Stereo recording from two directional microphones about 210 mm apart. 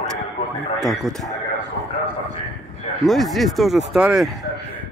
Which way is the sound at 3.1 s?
Centre (ahead or behind).